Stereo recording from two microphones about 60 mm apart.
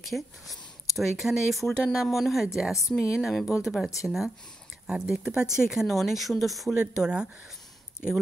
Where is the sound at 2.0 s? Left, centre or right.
Centre.